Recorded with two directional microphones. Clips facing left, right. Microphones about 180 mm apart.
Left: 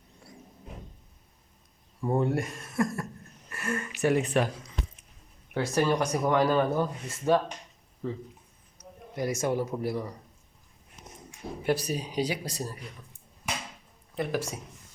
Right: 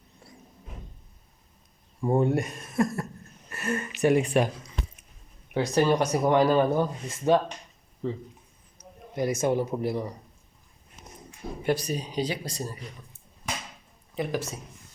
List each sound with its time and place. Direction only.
2.1 s speech: 20° right (ahead or behind)
5.5 s speech: 20° right (ahead or behind)
9.1 s speech: 20° right (ahead or behind)
11.6 s speech: 5° left (ahead or behind)
14.2 s speech: 10° left (ahead or behind)